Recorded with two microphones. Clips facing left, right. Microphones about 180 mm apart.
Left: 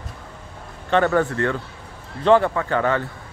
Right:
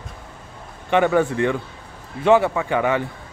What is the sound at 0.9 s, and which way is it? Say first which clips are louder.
Speech: right 1 dB; 10° right (ahead or behind).